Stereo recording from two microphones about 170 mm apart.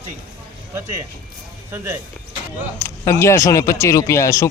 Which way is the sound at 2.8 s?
15° left (ahead or behind).